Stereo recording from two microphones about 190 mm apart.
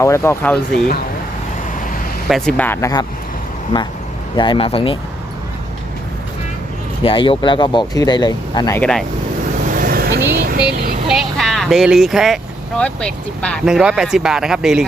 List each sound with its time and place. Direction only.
0.0 s speech: 15° left (ahead or behind)
2.2 s speech: centre (ahead or behind); by 3.1 s 20° left (ahead or behind)
4.4 s speech: 25° left (ahead or behind)
7.0 s speech: 30° left (ahead or behind)
8.8 s speech: 5° left (ahead or behind)
9.7 s vehicle: 50° right (ahead or behind)
10.3 s speech: 50° right (ahead or behind)
11.1 s speech: centre (ahead or behind)